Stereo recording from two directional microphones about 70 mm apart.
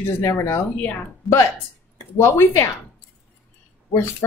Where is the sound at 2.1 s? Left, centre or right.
Left.